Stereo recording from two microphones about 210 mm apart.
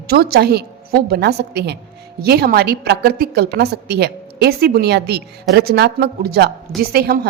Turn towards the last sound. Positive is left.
turn(degrees=-45)  # may be behind; listen again after turning